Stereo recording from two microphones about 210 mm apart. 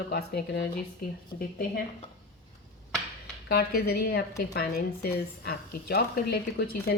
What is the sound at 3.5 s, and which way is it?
A woman's voice, 50° left (ahead or behind).